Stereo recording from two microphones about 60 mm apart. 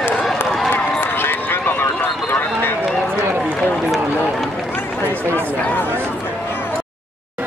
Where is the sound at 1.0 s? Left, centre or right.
Left.